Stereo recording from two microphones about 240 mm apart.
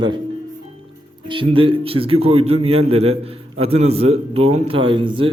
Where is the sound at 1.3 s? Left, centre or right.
Right.